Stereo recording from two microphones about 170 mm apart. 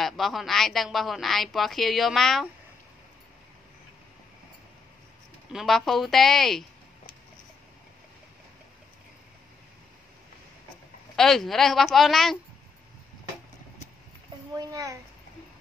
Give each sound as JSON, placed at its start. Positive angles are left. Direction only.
{"t": 0.0, "sound": "speech", "side_deg": 0}
{"t": 5.5, "sound": "speech", "side_deg": 0}
{"t": 11.1, "sound": "speech", "side_deg": 0}
{"t": 14.6, "sound": "a child's voice", "side_deg": -20}